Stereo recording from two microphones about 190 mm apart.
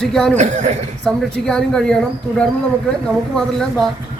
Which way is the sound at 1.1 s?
5° left (ahead or behind).